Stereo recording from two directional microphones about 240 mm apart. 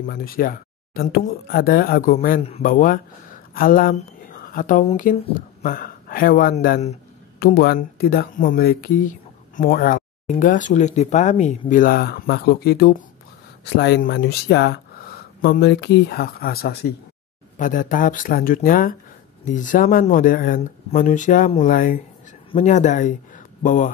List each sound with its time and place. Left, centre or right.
0.0 s speech: left